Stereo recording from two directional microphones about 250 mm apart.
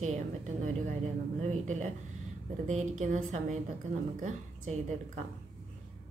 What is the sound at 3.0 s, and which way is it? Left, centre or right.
A woman's voice, right.